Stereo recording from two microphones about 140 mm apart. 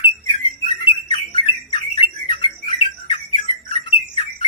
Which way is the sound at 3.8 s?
50° left (ahead or behind).